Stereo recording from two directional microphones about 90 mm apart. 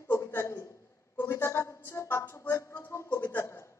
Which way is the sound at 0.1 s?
30° left (ahead or behind).